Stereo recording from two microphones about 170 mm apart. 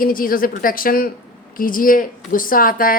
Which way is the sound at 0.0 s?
55° left (ahead or behind).